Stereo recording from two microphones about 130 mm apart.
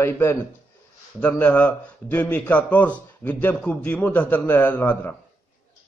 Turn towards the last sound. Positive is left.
turn(degrees=15)  # may be behind; listen again after turning